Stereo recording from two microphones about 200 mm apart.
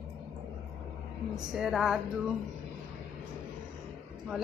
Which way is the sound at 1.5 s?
Centre (ahead or behind).